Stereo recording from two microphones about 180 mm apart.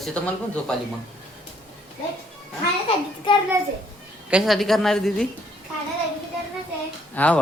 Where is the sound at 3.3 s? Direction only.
30° left (ahead or behind).